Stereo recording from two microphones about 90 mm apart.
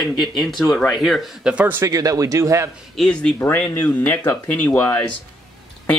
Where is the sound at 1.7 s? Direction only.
40° right (ahead or behind).